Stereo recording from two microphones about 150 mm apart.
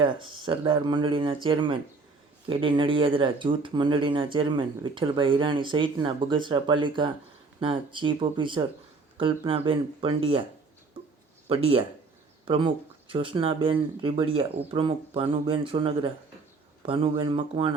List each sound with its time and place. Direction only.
0.0 s speech: 35° right (ahead or behind)
11.0 s a sound: 35° right (ahead or behind)
11.4 s speech: 35° right (ahead or behind)